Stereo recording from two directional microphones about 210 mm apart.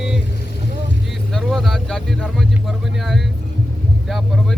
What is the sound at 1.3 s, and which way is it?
Speech, centre (ahead or behind).